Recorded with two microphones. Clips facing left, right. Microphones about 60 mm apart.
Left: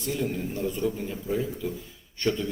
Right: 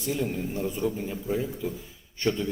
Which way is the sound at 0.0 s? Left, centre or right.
Centre.